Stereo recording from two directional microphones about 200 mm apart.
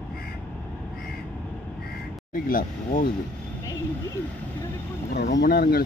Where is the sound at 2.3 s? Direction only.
45° left (ahead or behind).